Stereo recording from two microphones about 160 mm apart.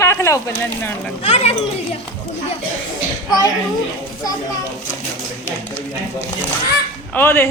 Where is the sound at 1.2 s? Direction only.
40° left (ahead or behind).